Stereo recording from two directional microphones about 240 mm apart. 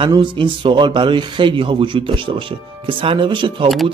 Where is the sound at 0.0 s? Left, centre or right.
Right.